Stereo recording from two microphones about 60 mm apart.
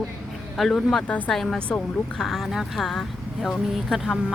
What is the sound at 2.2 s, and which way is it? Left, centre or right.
Speech, centre.